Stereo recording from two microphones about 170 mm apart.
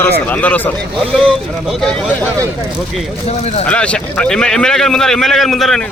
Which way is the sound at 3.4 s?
40° left (ahead or behind).